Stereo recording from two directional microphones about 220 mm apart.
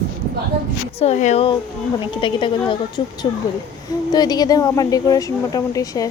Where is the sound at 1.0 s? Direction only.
30° left (ahead or behind).